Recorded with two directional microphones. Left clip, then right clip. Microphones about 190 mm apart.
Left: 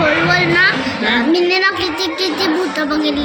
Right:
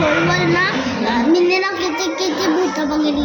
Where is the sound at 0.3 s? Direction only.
15° right (ahead or behind).